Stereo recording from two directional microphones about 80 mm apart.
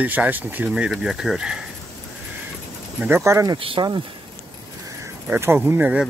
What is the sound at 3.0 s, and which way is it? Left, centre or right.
Speech, right.